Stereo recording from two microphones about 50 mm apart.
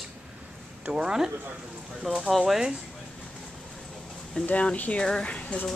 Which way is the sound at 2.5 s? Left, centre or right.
Centre.